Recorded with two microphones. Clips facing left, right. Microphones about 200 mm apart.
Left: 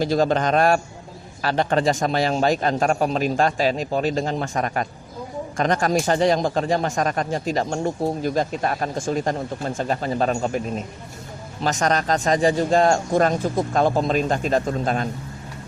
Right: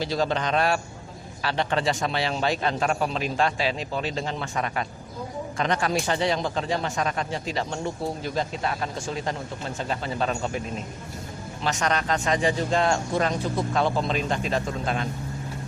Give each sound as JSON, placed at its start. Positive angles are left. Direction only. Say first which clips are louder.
{"t": 0.0, "sound": "a man's voice", "louder": "left 6 dB", "side_deg": 45}
{"t": 11.6, "sound": "a man's voice", "louder": "left 5 dB", "side_deg": 40}